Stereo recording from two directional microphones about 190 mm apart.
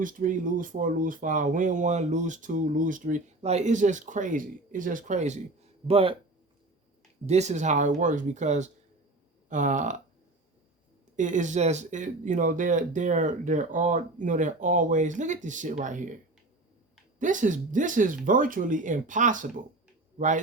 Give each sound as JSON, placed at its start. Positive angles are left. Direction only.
{"t": 0.0, "sound": "speech", "side_deg": -45}
{"t": 7.3, "sound": "speech", "side_deg": -35}
{"t": 11.2, "sound": "speech", "side_deg": -40}
{"t": 17.2, "sound": "speech", "side_deg": -40}